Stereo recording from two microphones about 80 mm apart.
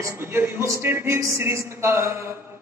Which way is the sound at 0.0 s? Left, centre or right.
Right.